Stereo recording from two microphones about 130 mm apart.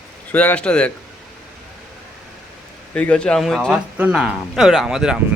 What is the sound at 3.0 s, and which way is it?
A man's voice, 10° left (ahead or behind).